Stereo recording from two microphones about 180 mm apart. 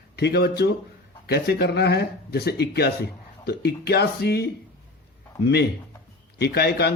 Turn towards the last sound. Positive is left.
turn(degrees=65)  # may be behind; listen again after turning